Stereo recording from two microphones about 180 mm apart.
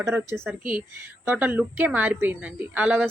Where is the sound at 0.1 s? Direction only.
15° right (ahead or behind).